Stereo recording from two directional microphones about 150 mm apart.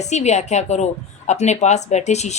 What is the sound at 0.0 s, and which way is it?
A woman's voice, 50° left (ahead or behind).